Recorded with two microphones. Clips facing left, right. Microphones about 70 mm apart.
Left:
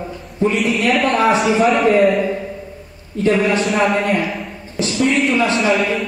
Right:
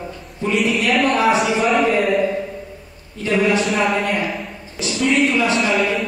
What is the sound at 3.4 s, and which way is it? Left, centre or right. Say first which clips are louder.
A man's voice: left 1 dB; centre.